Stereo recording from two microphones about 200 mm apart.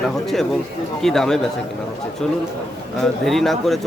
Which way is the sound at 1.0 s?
Centre (ahead or behind).